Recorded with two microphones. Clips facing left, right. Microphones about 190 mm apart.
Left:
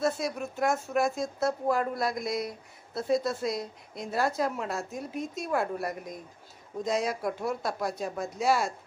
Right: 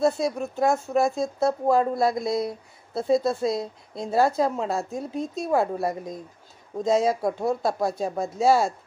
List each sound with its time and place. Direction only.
0.0 s speech: 25° right (ahead or behind)